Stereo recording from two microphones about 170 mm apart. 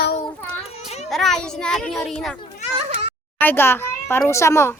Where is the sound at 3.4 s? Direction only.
10° left (ahead or behind).